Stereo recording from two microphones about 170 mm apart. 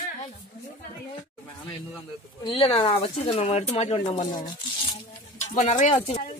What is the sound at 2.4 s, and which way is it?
Speech, 30° left (ahead or behind).